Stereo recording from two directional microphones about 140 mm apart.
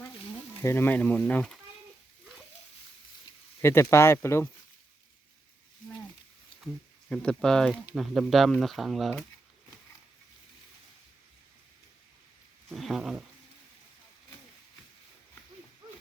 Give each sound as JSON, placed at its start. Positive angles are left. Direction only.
{"t": 0.6, "sound": "speech", "side_deg": 20}
{"t": 3.6, "sound": "speech", "side_deg": 20}
{"t": 7.1, "sound": "speech", "side_deg": 5}
{"t": 12.7, "sound": "speech", "side_deg": 0}